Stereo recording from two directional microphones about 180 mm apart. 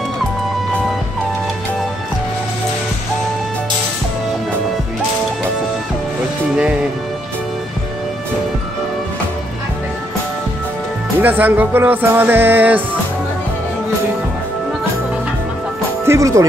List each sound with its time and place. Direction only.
11.1 s music: 10° right (ahead or behind)
16.1 s speech: 15° right (ahead or behind)